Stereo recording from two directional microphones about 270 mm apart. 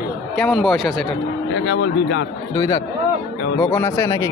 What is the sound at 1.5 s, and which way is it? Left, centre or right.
Speech, left.